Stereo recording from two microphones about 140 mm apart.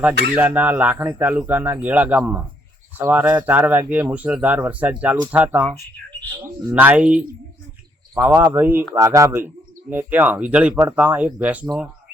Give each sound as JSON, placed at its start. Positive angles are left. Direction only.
{"t": 0.0, "sound": "speech", "side_deg": -10}